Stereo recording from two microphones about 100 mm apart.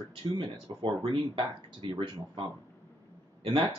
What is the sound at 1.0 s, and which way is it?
Speech, 65° right (ahead or behind).